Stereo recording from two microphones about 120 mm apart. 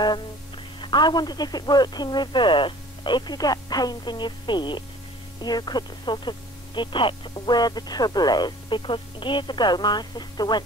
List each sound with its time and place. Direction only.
0.7 s speech: 40° left (ahead or behind)